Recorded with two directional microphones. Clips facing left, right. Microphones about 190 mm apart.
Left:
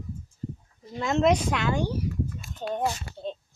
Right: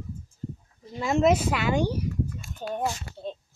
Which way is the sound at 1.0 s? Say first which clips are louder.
Right 1 dB; 5° right (ahead or behind).